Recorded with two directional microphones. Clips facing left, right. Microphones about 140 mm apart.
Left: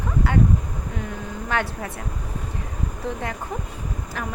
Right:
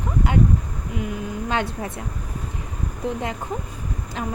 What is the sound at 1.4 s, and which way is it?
Speech, 20° right (ahead or behind).